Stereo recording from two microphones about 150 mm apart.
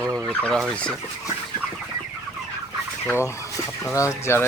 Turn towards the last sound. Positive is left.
turn(degrees=20)  # may be behind; listen again after turning